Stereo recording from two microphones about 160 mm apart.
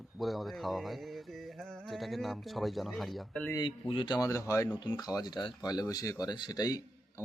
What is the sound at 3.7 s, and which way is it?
Speech, 35° left (ahead or behind).